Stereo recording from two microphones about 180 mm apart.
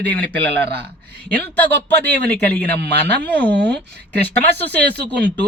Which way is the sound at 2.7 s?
65° right (ahead or behind).